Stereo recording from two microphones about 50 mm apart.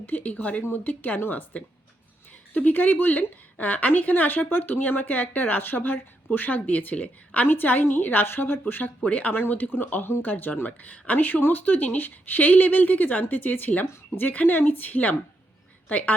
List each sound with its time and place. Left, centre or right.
0.0 s a woman's voice: left
2.6 s a woman's voice: left
9.0 s speech: left
9.3 s a woman's voice: left